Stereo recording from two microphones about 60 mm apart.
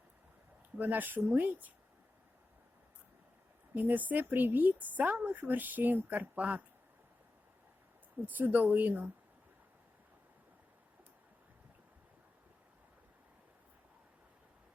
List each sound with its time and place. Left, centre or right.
0.8 s speech: right
3.8 s speech: right
8.2 s speech: right